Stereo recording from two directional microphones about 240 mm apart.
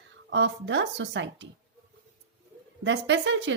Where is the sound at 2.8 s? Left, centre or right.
Right.